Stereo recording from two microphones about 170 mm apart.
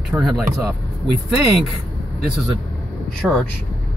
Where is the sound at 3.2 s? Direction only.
5° left (ahead or behind).